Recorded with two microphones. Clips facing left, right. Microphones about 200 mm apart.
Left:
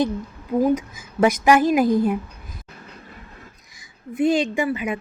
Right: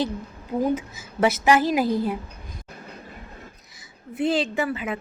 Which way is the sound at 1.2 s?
15° left (ahead or behind).